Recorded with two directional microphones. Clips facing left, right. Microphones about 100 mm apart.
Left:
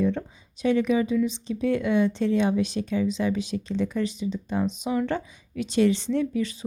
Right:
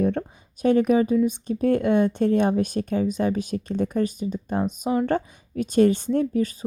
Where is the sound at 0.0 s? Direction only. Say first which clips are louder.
Right 2 dB; 50° right (ahead or behind).